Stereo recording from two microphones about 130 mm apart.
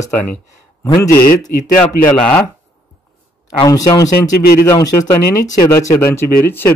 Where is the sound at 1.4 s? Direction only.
90° left.